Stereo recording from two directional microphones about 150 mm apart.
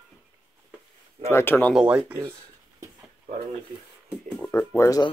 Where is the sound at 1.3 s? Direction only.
15° left (ahead or behind).